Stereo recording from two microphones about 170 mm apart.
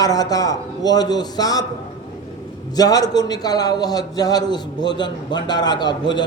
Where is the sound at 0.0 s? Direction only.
20° left (ahead or behind).